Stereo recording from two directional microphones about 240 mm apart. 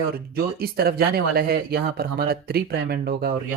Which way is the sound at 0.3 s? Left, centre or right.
Right.